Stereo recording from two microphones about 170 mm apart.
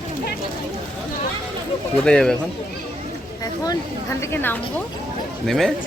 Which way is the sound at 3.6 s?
20° left (ahead or behind).